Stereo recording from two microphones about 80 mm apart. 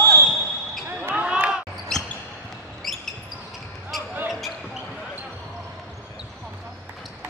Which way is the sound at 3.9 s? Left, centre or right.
Centre.